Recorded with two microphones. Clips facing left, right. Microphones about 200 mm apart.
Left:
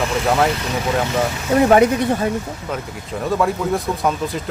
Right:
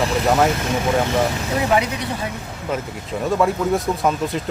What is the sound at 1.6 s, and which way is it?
Speech, 50° left (ahead or behind).